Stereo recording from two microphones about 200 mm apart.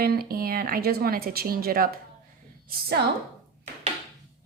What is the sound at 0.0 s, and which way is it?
A woman's voice, 50° right (ahead or behind).